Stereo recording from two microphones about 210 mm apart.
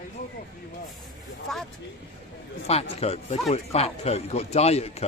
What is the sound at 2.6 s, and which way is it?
A man's voice, 30° left (ahead or behind).